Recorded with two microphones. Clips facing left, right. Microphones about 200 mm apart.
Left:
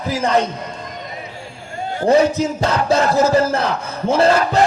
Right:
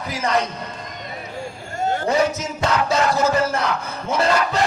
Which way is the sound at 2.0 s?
35° left (ahead or behind).